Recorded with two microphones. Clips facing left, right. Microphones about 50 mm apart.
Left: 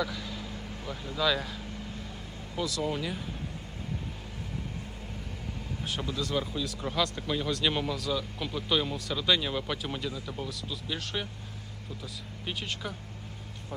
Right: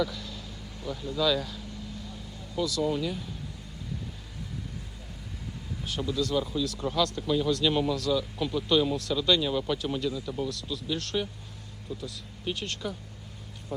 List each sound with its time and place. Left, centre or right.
0.0 s vehicle: centre
0.9 s speech: centre
2.6 s speech: left
6.0 s speech: left; by 12.9 s centre